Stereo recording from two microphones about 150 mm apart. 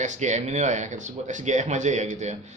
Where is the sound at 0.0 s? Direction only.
55° right (ahead or behind).